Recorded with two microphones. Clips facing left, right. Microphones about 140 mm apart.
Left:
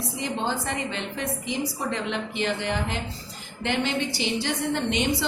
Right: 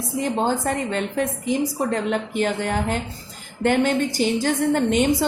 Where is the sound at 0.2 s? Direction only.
50° right (ahead or behind).